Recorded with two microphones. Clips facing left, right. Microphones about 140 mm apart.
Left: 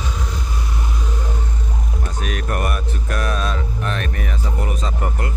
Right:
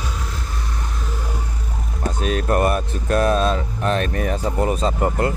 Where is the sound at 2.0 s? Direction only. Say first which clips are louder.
Right 7 dB; 30° right (ahead or behind).